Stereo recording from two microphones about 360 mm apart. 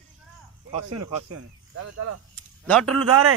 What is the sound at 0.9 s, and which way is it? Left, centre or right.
Speech, right.